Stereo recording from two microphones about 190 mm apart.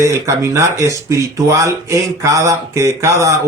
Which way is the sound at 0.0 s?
15° right (ahead or behind).